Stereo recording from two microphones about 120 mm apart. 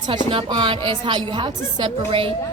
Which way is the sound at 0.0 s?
45° right (ahead or behind).